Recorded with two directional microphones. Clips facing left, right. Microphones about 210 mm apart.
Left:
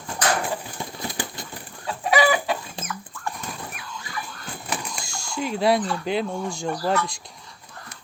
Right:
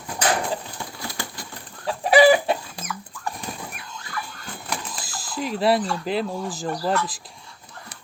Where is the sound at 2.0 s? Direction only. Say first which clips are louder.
Right 5 dB; 30° right (ahead or behind).